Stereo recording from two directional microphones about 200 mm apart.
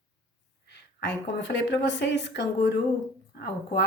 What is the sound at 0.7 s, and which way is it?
Speech, 60° left (ahead or behind).